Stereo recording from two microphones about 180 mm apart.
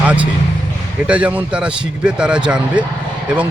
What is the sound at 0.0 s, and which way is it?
Speech, 5° right (ahead or behind).